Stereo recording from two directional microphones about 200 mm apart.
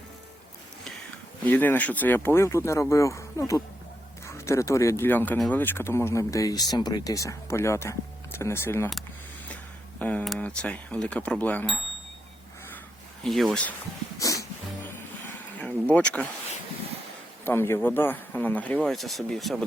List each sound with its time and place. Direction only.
1.5 s speech: 10° left (ahead or behind)
10.0 s speech: 5° left (ahead or behind)
13.2 s speech: centre (ahead or behind)
14.2 s music: 15° left (ahead or behind)
15.5 s vehicle: 5° left (ahead or behind)
17.4 s speech: 10° left (ahead or behind)